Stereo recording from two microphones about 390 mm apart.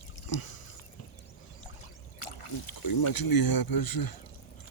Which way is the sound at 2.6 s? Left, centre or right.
Left.